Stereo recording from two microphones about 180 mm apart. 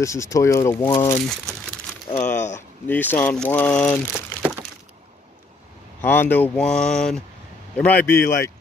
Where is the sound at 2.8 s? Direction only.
10° left (ahead or behind).